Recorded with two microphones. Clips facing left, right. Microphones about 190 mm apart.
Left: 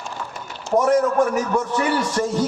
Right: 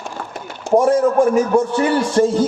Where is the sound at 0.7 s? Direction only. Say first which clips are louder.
Right 4 dB; 30° right (ahead or behind).